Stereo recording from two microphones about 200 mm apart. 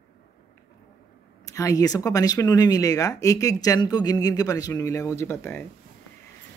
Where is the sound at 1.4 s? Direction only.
15° left (ahead or behind).